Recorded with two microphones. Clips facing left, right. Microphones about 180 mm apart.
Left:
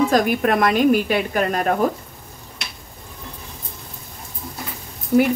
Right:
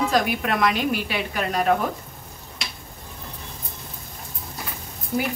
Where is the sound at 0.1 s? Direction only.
45° left (ahead or behind).